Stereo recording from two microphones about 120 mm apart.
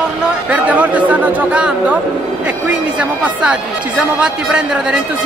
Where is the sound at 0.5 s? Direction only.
10° right (ahead or behind).